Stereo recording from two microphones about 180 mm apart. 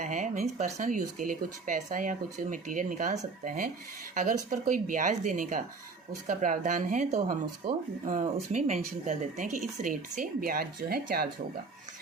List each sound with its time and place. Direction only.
0.0 s speech: 45° right (ahead or behind)
8.0 s speech: 45° right (ahead or behind)